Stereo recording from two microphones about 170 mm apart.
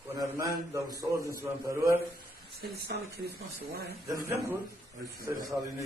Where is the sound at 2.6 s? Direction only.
70° right (ahead or behind).